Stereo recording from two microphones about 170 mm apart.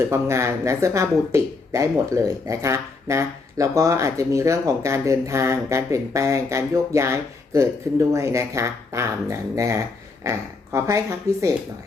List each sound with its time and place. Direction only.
0.0 s speech: 15° right (ahead or behind)